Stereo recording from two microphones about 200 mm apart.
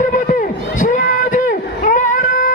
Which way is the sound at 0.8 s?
40° left (ahead or behind).